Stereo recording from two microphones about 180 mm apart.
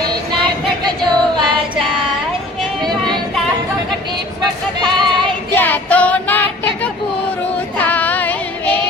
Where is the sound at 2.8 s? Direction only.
25° right (ahead or behind).